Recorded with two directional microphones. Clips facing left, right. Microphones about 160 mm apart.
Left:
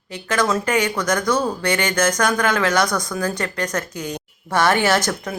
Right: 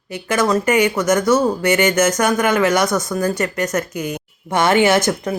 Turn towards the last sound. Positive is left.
turn(degrees=-15)  # may be behind; listen again after turning